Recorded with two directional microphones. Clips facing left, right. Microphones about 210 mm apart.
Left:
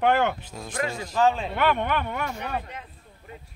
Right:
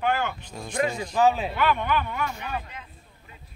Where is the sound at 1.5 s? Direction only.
60° left (ahead or behind).